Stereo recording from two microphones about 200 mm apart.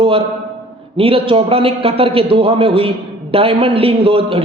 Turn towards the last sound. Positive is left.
turn(degrees=-30)  # may be behind; listen again after turning